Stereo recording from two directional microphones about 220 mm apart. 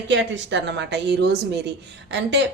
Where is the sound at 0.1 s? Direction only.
55° right (ahead or behind).